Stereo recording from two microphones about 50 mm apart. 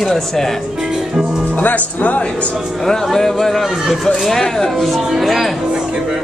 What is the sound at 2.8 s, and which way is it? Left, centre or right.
Speech, centre.